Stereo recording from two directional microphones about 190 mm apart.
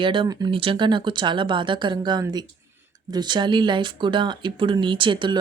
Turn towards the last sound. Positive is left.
turn(degrees=-25)  # may be behind; listen again after turning